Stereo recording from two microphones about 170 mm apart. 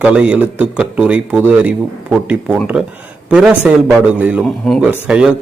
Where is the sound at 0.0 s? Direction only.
5° right (ahead or behind).